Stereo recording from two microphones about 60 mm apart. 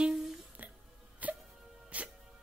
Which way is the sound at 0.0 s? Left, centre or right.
Centre.